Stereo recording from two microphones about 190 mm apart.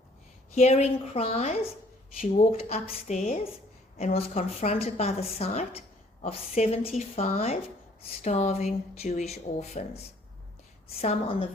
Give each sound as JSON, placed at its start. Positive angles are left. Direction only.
{"t": 0.5, "sound": "a woman's voice", "side_deg": 35}